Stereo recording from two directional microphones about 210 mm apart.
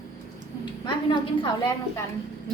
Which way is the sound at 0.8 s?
20° left (ahead or behind).